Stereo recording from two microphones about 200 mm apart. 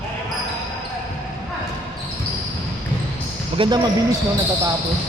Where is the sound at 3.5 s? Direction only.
25° right (ahead or behind).